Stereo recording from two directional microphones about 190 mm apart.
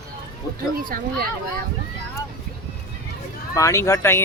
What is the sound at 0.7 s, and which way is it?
Speech, 50° right (ahead or behind).